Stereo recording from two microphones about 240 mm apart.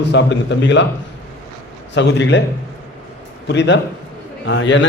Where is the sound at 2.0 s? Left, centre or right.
Left.